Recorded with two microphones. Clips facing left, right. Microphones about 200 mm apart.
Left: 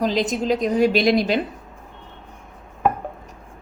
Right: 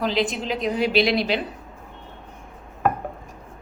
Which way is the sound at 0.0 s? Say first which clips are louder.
Left 3 dB; 40° left (ahead or behind).